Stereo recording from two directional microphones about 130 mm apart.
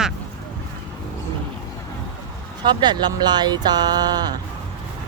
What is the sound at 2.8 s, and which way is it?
Speech, 35° right (ahead or behind).